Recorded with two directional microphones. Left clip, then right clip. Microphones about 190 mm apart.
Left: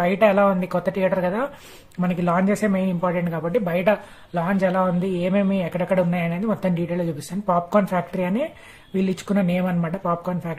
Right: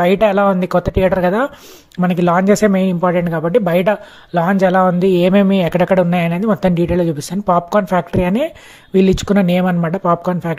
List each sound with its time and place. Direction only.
0.0 s speech: 45° right (ahead or behind)